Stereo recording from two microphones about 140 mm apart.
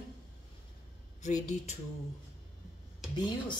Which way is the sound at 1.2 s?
60° left (ahead or behind).